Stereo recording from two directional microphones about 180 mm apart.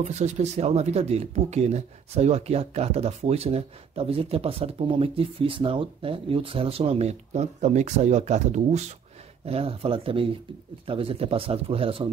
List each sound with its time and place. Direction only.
0.0 s speech: 40° right (ahead or behind)